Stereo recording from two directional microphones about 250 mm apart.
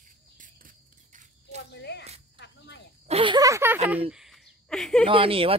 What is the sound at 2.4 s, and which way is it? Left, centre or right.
Cricket, left.